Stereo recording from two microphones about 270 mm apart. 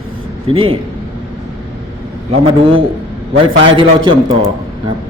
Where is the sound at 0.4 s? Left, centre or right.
Centre.